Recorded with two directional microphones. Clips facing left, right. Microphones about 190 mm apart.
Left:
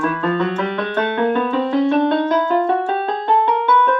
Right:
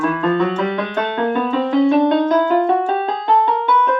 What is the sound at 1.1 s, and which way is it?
Music, 15° right (ahead or behind).